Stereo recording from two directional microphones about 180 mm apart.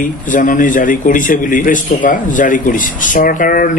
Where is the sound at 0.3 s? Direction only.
45° left (ahead or behind).